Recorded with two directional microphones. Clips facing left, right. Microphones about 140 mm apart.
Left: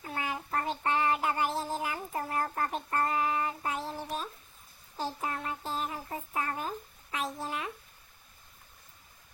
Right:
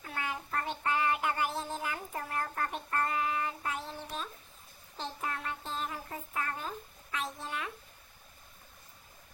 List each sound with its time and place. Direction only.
0.0 s child singing: 30° left (ahead or behind)
3.6 s child singing: centre (ahead or behind)
3.9 s a sound: 30° left (ahead or behind)
7.3 s babbling: 30° left (ahead or behind)